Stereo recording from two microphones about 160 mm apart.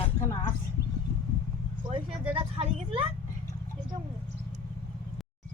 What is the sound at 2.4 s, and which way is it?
Speech, 35° right (ahead or behind).